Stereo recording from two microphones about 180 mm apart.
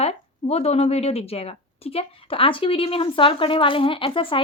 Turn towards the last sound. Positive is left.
turn(degrees=30)  # may be behind; listen again after turning